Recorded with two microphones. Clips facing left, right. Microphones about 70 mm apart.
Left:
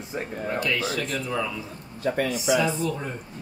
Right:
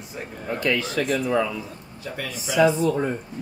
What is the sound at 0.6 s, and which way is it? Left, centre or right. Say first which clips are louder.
Speech: right 5 dB; right.